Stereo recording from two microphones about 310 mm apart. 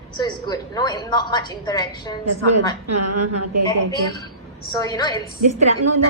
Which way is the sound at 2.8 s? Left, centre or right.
Right.